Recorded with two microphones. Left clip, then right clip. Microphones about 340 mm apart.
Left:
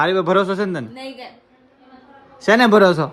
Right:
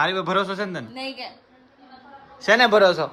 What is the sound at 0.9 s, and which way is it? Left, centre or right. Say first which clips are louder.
Speech: right 1 dB; centre.